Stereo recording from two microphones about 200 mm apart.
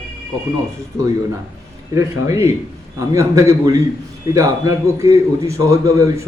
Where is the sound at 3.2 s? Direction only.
15° right (ahead or behind).